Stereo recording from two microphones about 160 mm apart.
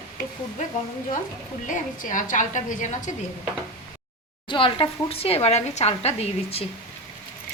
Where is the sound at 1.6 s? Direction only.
55° left (ahead or behind).